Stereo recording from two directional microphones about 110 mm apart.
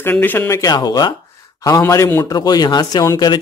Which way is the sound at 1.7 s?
25° left (ahead or behind).